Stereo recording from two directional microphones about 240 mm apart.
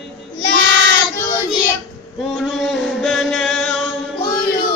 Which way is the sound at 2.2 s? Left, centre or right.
Centre.